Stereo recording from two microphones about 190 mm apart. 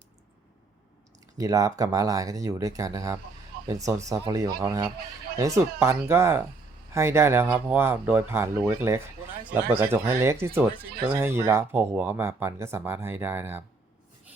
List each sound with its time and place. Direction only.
1.4 s speech: 20° right (ahead or behind)